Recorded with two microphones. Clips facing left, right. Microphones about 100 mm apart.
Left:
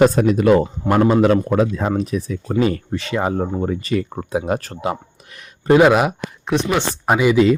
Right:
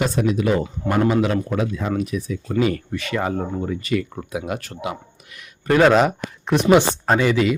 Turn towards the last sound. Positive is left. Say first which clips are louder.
# left 3 dB
turn(degrees=15)  # may be behind; listen again after turning